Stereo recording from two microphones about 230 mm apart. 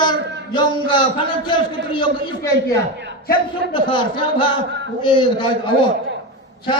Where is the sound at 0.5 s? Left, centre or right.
Centre.